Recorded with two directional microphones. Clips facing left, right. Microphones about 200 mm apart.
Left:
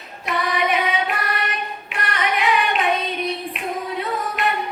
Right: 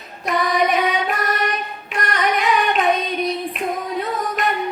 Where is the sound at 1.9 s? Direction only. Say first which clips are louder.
Right 4 dB; 40° right (ahead or behind).